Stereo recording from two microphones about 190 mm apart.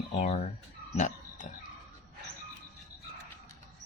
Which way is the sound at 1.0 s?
40° left (ahead or behind).